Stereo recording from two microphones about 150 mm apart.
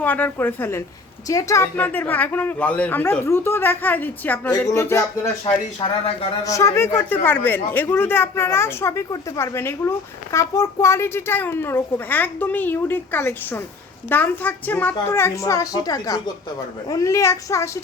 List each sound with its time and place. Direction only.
0.0 s a man's voice: 10° left (ahead or behind)
6.4 s a man's voice: 20° left (ahead or behind)